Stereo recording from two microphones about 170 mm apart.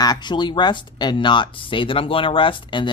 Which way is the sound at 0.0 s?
25° left (ahead or behind).